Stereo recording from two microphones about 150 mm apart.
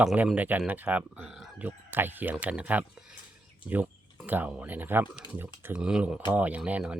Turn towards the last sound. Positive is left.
turn(degrees=-10)  # may be behind; listen again after turning